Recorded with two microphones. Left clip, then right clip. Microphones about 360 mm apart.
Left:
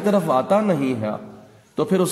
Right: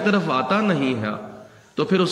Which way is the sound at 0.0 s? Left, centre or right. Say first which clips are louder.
Left 2 dB; centre.